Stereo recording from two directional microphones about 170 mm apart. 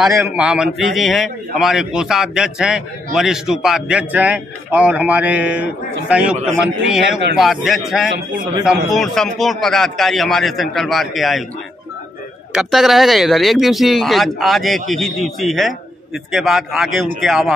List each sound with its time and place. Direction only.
0.4 s a man's voice: 5° right (ahead or behind)
12.5 s a man's voice: centre (ahead or behind)